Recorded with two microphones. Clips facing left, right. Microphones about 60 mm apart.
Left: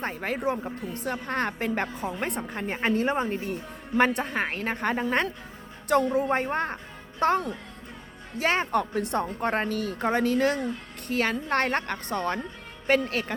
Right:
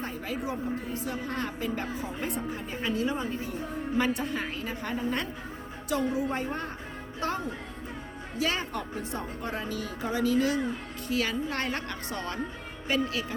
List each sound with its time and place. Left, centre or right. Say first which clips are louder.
0.0 s a woman's voice: left 5 dB; left
8.4 s a woman's voice: left 6 dB; left